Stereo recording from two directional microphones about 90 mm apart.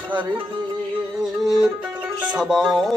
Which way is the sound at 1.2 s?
5° right (ahead or behind).